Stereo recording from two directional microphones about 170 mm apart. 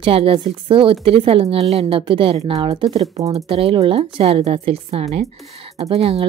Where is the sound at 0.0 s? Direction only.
35° right (ahead or behind).